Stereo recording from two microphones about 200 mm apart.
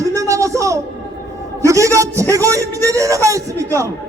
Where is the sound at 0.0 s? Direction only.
15° right (ahead or behind).